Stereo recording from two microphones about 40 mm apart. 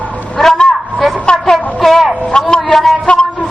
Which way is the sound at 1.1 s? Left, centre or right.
Left.